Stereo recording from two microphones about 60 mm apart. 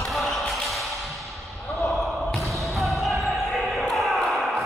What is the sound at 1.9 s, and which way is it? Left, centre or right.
Basketball bounce, centre.